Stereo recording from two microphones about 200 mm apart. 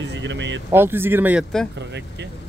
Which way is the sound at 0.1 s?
65° right (ahead or behind).